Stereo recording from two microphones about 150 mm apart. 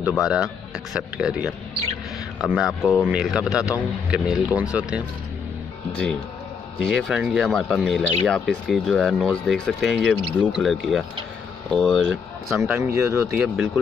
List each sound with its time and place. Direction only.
0.2 s a man's voice: 5° right (ahead or behind)
6.9 s speech: centre (ahead or behind)
12.6 s a man's voice: 15° right (ahead or behind)